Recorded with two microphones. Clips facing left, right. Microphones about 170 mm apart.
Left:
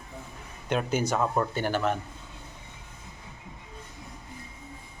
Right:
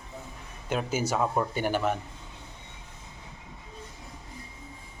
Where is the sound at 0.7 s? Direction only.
5° right (ahead or behind).